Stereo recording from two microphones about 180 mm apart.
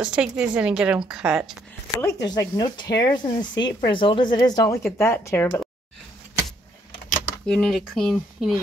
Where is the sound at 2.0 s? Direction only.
20° left (ahead or behind).